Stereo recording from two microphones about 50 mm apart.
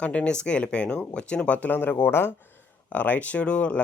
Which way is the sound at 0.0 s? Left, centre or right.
Left.